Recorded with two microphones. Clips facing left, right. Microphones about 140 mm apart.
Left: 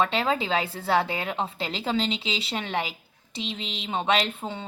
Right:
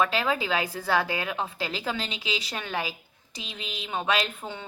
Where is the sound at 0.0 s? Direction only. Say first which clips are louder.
Left 1 dB; 25° left (ahead or behind).